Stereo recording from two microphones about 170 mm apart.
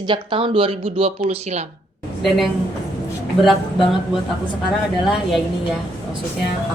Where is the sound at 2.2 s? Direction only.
Centre (ahead or behind).